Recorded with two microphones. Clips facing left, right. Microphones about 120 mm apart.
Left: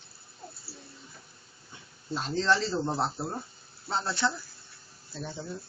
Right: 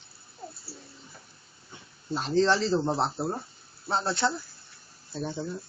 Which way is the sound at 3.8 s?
25° right (ahead or behind).